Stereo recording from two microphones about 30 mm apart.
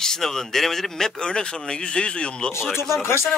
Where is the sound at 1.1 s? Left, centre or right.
Left.